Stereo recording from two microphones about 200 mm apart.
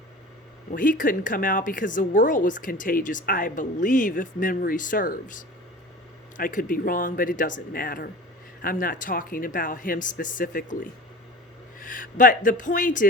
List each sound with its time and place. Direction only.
0.7 s speech: 45° left (ahead or behind)